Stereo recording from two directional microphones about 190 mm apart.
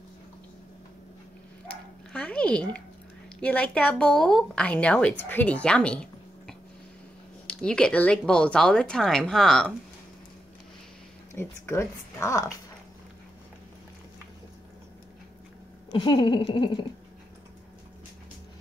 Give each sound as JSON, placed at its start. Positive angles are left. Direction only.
{"t": 1.7, "sound": "dog", "side_deg": 5}
{"t": 3.3, "sound": "a woman's voice", "side_deg": 5}
{"t": 11.3, "sound": "speech", "side_deg": 15}
{"t": 15.9, "sound": "speech", "side_deg": 25}